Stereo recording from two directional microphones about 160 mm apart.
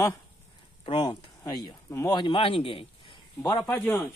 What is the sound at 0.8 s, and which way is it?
Speech, 30° left (ahead or behind).